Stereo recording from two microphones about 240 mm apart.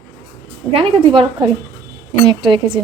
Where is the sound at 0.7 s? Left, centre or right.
Right.